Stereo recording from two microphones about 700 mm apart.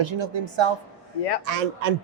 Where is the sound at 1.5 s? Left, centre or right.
Right.